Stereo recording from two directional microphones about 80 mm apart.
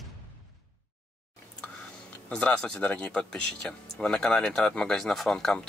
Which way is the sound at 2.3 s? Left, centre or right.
Centre.